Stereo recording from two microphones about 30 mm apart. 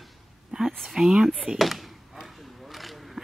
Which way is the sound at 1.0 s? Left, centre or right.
Right.